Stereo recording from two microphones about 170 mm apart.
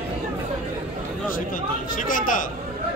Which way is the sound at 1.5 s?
55° left (ahead or behind).